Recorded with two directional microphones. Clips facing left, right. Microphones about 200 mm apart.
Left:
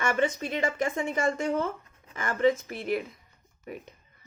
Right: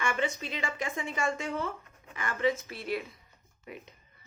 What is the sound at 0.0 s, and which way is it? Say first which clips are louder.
A woman's voice: left 5 dB; 45° left (ahead or behind).